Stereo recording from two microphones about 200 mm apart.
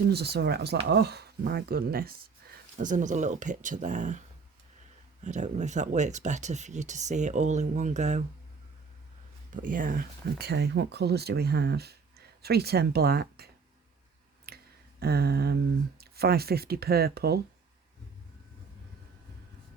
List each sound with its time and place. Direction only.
0.1 s speech: 55° right (ahead or behind); by 4.2 s 40° right (ahead or behind)
5.2 s speech: 35° right (ahead or behind)
9.6 s speech: 40° right (ahead or behind)
14.4 s a sound: 50° right (ahead or behind)
16.0 s speech: 50° right (ahead or behind)